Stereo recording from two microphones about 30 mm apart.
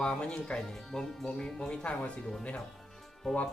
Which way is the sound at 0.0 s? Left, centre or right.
Left.